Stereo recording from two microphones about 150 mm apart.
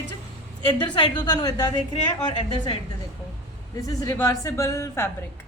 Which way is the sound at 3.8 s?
20° left (ahead or behind).